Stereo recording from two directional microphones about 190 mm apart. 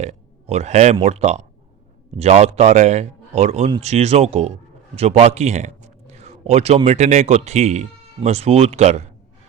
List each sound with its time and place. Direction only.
0.0 s speech: 35° right (ahead or behind)